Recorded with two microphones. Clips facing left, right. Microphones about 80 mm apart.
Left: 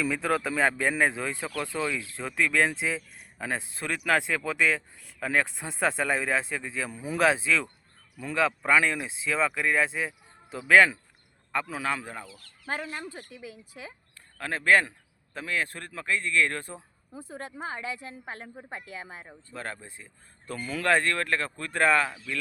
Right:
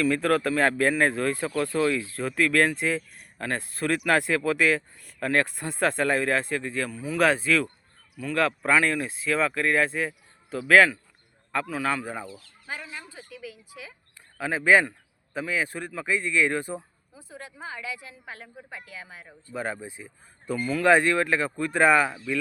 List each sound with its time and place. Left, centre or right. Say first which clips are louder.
0.0 s a man's voice: right 4 dB; centre
12.4 s speech: left 4 dB; left
13.3 s a woman's voice: right 2 dB; left
14.3 s speech: right 3 dB; centre
17.2 s a woman's voice: left 4 dB; left
19.5 s speech: right 6 dB; centre